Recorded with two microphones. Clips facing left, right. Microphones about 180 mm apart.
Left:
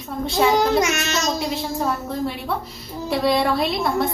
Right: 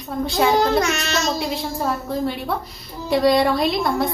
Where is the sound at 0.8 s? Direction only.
20° left (ahead or behind).